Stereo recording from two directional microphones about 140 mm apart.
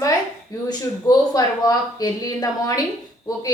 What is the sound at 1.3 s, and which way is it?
A woman's voice, 25° left (ahead or behind).